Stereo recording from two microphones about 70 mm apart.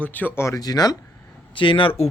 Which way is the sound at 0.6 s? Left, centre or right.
Left.